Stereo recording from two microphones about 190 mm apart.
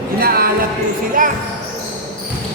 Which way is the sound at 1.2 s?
45° right (ahead or behind).